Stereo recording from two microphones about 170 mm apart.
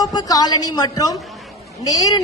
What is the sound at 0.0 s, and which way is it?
A woman's voice, 20° left (ahead or behind).